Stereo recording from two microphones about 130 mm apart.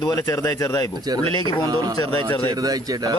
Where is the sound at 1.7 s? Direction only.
30° right (ahead or behind).